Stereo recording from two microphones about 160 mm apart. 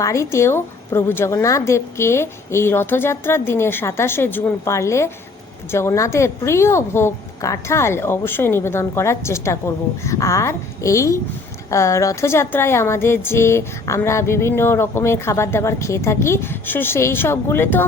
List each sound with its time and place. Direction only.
0.0 s a woman's voice: 20° left (ahead or behind)